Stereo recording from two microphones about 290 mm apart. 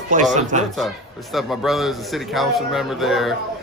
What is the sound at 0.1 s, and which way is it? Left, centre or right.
Speech, right.